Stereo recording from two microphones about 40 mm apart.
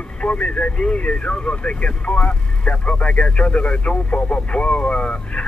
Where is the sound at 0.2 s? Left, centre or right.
Left.